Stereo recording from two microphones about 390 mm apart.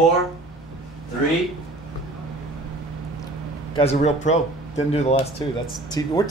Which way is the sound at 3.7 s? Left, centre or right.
Centre.